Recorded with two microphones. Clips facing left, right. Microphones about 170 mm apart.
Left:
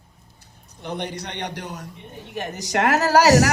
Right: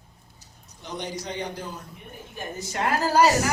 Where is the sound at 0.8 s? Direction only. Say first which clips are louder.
Left 3 dB; 60° left (ahead or behind).